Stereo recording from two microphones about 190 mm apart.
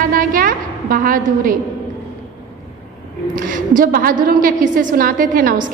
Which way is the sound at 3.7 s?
45° right (ahead or behind).